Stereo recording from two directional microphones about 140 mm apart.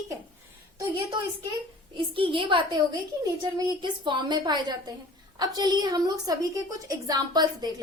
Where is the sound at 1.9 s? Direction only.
40° right (ahead or behind).